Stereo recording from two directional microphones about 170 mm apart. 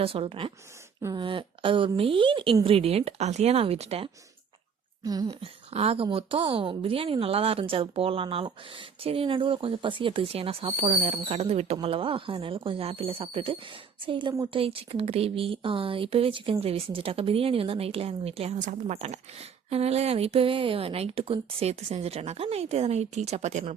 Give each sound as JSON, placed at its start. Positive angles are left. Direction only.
{"t": 0.0, "sound": "speech", "side_deg": -35}
{"t": 5.0, "sound": "speech", "side_deg": -25}
{"t": 5.4, "sound": "speech", "side_deg": -35}